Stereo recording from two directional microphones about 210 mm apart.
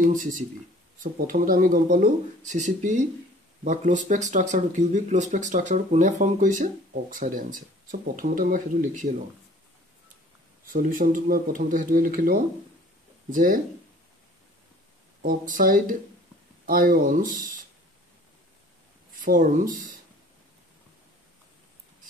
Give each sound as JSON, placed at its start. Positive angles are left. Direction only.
{"t": 0.0, "sound": "speech", "side_deg": -40}
{"t": 10.6, "sound": "speech", "side_deg": -40}
{"t": 15.2, "sound": "speech", "side_deg": -40}
{"t": 19.2, "sound": "speech", "side_deg": -40}